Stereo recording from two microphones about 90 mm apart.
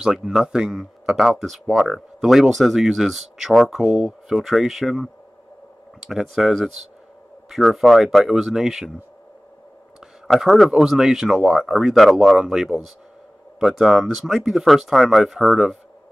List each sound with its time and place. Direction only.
0.0 s speech: 5° right (ahead or behind)
9.9 s speech: 5° right (ahead or behind)